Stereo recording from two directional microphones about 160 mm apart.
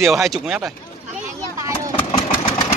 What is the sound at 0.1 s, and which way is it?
Speech, centre (ahead or behind).